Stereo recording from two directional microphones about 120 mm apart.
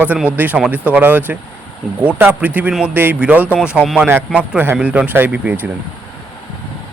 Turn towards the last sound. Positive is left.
turn(degrees=-10)  # may be behind; listen again after turning